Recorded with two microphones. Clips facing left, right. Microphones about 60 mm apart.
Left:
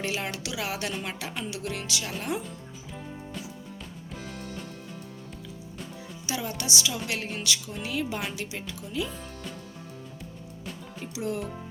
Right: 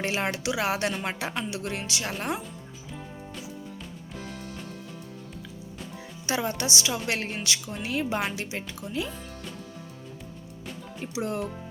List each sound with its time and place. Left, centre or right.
0.0 s speech: right
6.2 s speech: right
11.0 s speech: right